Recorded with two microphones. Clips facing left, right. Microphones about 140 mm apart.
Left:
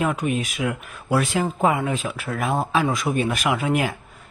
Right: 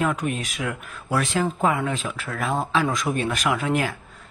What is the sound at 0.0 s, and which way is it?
Speech, 5° left (ahead or behind).